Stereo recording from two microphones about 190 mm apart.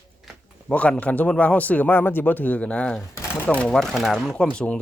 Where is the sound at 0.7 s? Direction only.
5° left (ahead or behind).